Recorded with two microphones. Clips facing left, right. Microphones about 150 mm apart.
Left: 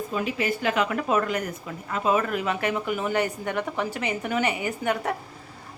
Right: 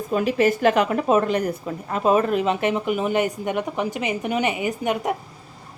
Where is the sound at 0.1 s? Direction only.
45° right (ahead or behind).